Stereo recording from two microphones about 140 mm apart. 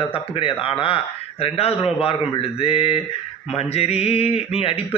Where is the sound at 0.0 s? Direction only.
40° left (ahead or behind).